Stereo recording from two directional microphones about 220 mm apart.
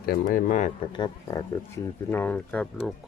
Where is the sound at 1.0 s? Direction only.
15° left (ahead or behind).